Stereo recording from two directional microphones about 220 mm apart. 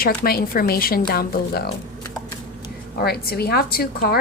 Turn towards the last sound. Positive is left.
turn(degrees=45)  # may be behind; listen again after turning